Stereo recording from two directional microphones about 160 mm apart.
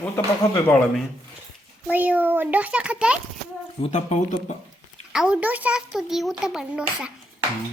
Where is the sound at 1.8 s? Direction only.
10° right (ahead or behind).